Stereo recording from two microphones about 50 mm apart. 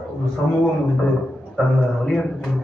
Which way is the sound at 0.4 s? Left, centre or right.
Left.